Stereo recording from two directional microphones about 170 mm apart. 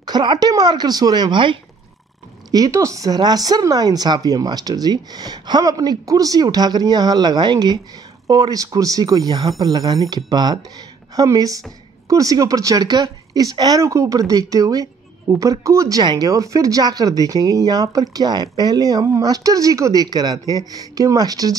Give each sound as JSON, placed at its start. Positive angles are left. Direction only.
{"t": 0.0, "sound": "speech", "side_deg": -25}
{"t": 2.5, "sound": "speech", "side_deg": -20}